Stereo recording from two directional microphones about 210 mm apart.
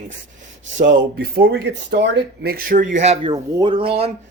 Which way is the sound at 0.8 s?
45° right (ahead or behind).